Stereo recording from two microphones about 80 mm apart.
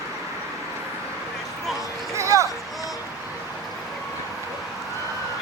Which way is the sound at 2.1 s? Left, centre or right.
Right.